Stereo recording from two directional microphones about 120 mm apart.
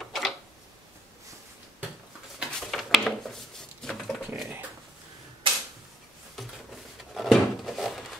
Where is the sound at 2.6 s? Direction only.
Centre (ahead or behind).